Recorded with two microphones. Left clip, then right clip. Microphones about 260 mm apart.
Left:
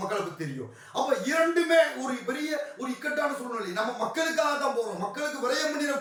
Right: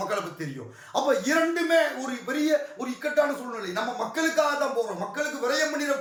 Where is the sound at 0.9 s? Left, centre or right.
Centre.